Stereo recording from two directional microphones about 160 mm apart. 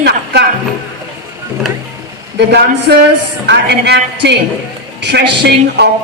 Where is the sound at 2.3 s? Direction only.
90° right.